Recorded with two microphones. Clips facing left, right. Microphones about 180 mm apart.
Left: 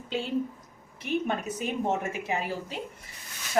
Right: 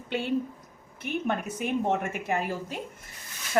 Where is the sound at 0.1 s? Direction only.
60° right (ahead or behind).